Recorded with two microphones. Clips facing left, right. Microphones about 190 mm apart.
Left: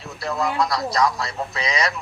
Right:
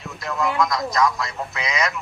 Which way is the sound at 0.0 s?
35° left (ahead or behind).